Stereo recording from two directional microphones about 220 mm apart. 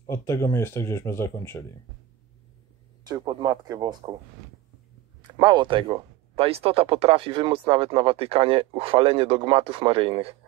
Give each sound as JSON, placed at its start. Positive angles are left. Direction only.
{"t": 0.0, "sound": "speech", "side_deg": 15}
{"t": 3.1, "sound": "speech", "side_deg": -20}
{"t": 5.4, "sound": "speech", "side_deg": -20}